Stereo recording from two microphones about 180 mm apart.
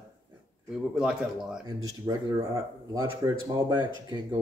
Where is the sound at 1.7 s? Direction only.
20° right (ahead or behind).